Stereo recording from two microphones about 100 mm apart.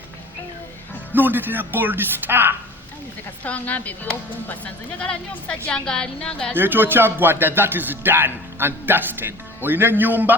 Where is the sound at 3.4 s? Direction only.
15° left (ahead or behind).